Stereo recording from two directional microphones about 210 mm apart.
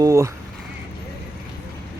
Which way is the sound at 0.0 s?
15° right (ahead or behind).